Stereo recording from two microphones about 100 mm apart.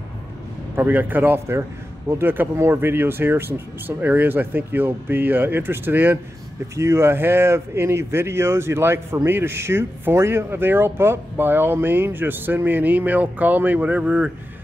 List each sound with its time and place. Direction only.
0.7 s speech: 20° right (ahead or behind)